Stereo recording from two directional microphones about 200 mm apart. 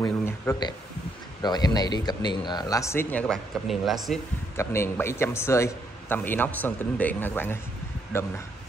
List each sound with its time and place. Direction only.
0.0 s a man's voice: 15° left (ahead or behind); by 4.2 s centre (ahead or behind)
4.6 s a man's voice: 10° left (ahead or behind)